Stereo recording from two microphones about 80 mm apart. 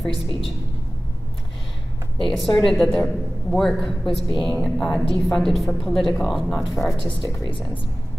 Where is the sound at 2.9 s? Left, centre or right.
Centre.